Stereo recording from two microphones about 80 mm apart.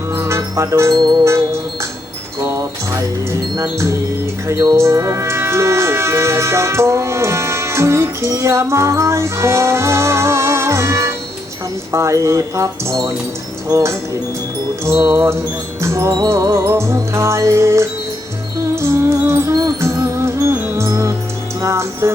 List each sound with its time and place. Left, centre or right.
0.3 s music: right
2.4 s wind chime: right
3.6 s music: right
4.8 s speech: right
11.9 s music: right
13.7 s speech: right
14.8 s music: right